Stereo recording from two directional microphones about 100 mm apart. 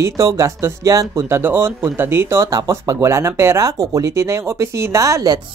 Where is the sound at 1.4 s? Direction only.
25° right (ahead or behind).